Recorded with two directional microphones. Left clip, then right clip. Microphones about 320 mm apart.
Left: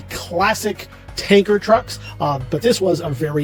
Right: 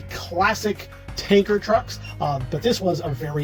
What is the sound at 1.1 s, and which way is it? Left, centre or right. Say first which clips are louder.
Speech: left 4 dB; left.